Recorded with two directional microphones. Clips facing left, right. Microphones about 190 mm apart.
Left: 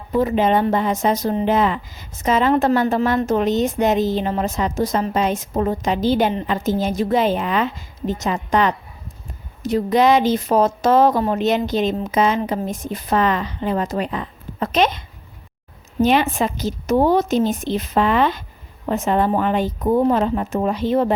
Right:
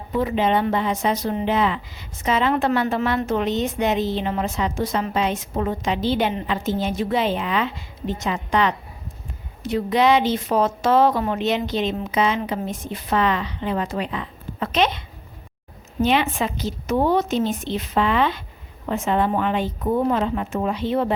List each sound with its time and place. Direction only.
0.1 s speech: 40° left (ahead or behind)
16.0 s speech: 45° left (ahead or behind)